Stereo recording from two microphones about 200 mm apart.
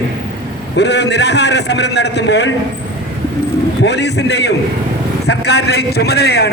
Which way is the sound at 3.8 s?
60° left (ahead or behind).